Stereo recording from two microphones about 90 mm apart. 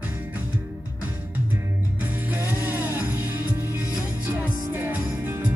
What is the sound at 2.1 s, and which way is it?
Music, 20° right (ahead or behind).